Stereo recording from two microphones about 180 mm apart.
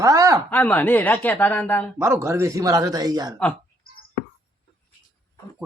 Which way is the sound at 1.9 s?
15° right (ahead or behind).